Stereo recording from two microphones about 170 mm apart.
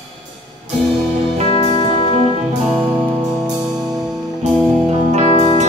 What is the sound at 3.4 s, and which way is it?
Music, 5° right (ahead or behind).